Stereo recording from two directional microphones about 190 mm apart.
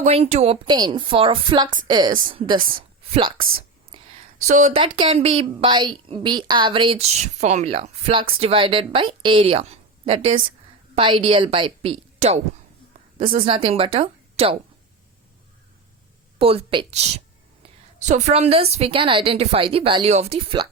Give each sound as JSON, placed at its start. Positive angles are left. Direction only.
{"t": 0.0, "sound": "a woman's voice", "side_deg": -35}
{"t": 4.4, "sound": "a woman's voice", "side_deg": -40}
{"t": 16.4, "sound": "a woman's voice", "side_deg": -30}